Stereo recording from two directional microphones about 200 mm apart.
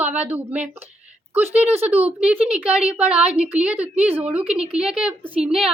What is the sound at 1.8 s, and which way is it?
Speech, 5° right (ahead or behind).